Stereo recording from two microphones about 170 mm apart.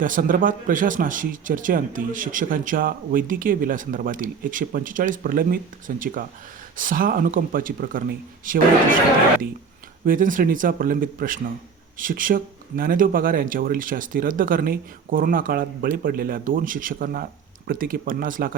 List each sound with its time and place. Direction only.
0.0 s speech: 50° right (ahead or behind)
10.1 s speech: 50° right (ahead or behind)